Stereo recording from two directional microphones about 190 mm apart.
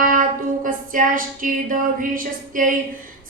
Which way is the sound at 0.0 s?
45° right (ahead or behind).